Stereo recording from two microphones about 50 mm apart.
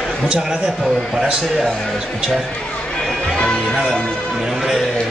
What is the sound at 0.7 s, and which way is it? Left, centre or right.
Speech, centre.